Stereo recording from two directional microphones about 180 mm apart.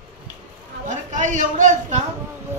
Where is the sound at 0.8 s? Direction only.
45° right (ahead or behind).